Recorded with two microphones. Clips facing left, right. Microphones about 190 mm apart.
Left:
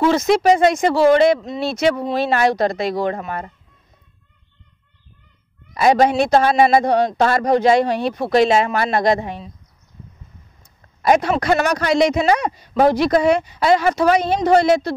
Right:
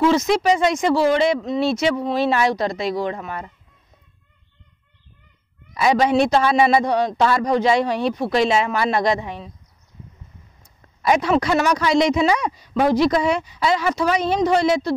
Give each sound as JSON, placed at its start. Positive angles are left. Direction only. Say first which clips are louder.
{"t": 0.0, "sound": "speech", "louder": "left 2 dB", "side_deg": 55}
{"t": 5.8, "sound": "speech", "louder": "left 2 dB", "side_deg": 50}
{"t": 11.0, "sound": "speech", "louder": "left 2 dB", "side_deg": 50}